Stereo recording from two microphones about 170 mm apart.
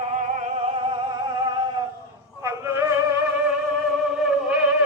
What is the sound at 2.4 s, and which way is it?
Male singing, 15° right (ahead or behind).